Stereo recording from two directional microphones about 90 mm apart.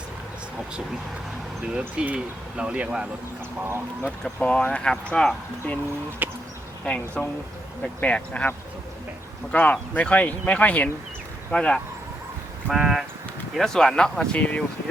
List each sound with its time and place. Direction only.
2.0 s speech: 10° right (ahead or behind)
4.2 s speech: 10° left (ahead or behind)
6.2 s a sound: 20° right (ahead or behind)
6.8 s speech: 15° left (ahead or behind)
12.6 s speech: 5° right (ahead or behind); by 14.6 s 15° left (ahead or behind)